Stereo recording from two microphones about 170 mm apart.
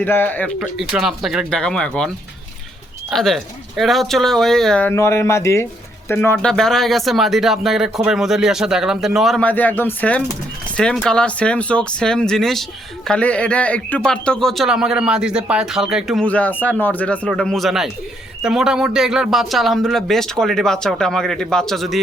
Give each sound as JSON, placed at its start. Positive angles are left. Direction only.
{"t": 0.0, "sound": "speech", "side_deg": 10}
{"t": 0.6, "sound": "speech", "side_deg": 0}
{"t": 16.2, "sound": "speech", "side_deg": 10}